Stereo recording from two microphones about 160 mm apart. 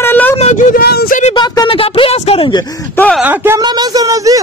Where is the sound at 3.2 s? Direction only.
15° right (ahead or behind).